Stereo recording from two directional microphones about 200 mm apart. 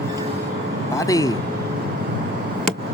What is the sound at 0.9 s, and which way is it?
Speech, 15° left (ahead or behind).